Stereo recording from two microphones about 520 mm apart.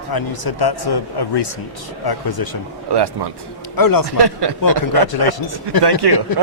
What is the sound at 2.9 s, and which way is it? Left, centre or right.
Speech, right.